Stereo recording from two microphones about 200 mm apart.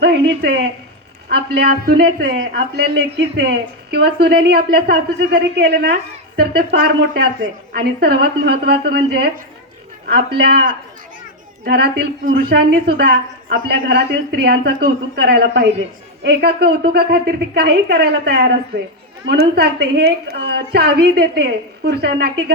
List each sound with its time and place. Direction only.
0.0 s a woman's voice: 55° right (ahead or behind)